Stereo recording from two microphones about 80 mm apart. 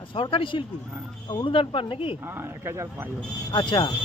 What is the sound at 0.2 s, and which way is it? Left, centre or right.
Speech, left.